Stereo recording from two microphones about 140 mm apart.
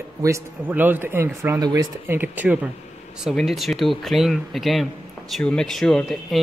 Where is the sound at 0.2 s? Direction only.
15° right (ahead or behind).